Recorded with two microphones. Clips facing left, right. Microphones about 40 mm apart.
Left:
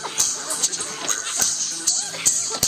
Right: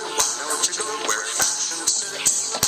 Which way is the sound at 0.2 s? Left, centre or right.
Right.